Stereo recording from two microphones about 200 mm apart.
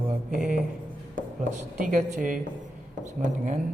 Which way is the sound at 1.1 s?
40° right (ahead or behind).